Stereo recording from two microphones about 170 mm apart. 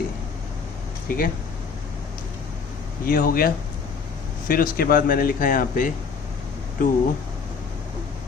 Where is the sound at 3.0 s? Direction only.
55° left (ahead or behind).